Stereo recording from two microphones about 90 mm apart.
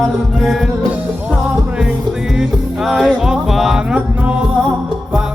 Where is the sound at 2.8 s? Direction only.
5° right (ahead or behind).